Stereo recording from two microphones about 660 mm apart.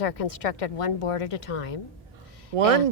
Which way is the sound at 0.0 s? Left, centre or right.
Left.